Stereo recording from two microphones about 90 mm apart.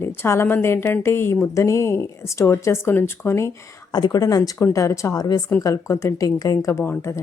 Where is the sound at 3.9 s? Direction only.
45° left (ahead or behind).